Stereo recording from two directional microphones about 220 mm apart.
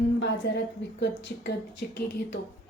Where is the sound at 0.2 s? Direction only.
55° left (ahead or behind).